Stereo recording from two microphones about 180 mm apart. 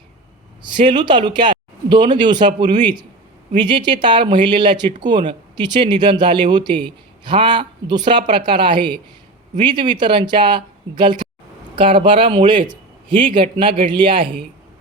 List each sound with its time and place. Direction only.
0.6 s speech: 25° right (ahead or behind)